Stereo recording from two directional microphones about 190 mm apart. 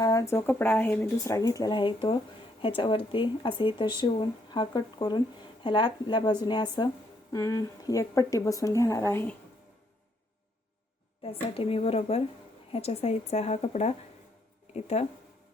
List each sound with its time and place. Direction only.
0.0 s speech: 15° left (ahead or behind)
11.2 s a woman's voice: 30° left (ahead or behind)